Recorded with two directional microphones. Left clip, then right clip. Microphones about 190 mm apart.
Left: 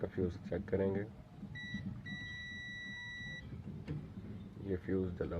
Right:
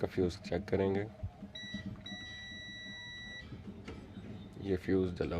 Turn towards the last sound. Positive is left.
turn(degrees=-45)  # may be behind; listen again after turning